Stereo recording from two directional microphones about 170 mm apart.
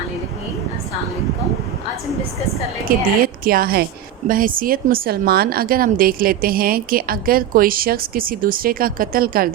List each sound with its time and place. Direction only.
2.9 s a woman's voice: 60° right (ahead or behind)